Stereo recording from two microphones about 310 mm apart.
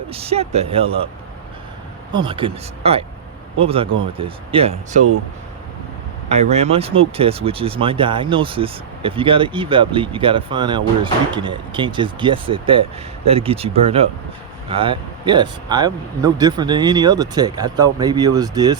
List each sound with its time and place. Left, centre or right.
0.1 s speech: centre
2.1 s speech: centre
6.2 s speech: centre